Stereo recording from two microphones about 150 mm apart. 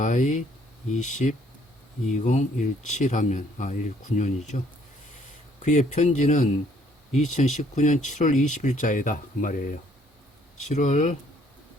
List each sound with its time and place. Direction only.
0.0 s speech: 55° left (ahead or behind)
5.6 s speech: 55° left (ahead or behind)
10.7 s speech: 50° left (ahead or behind)